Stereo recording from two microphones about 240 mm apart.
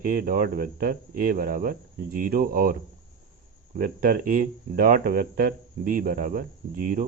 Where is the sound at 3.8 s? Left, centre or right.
Right.